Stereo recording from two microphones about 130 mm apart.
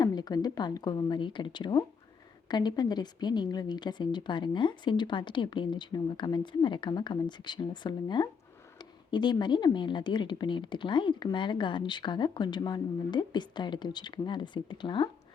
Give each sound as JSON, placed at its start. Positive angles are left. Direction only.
{"t": 0.0, "sound": "speech", "side_deg": 30}